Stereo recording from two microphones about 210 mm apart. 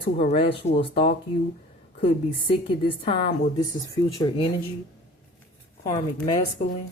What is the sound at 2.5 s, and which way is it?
A woman's voice, 25° left (ahead or behind).